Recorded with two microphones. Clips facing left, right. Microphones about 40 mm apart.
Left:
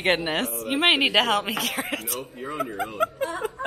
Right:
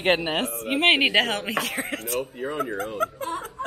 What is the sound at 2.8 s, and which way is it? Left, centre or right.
Speech, centre.